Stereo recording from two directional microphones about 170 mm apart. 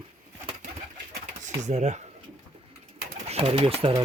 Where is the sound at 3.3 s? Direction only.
35° right (ahead or behind).